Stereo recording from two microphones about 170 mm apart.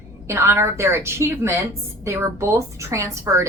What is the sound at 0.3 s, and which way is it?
A woman's voice, 15° right (ahead or behind).